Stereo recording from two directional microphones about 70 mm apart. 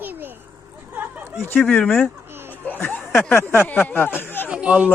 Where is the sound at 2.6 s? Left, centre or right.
Left.